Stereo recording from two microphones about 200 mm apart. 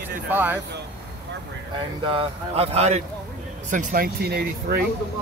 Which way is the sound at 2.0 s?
30° right (ahead or behind).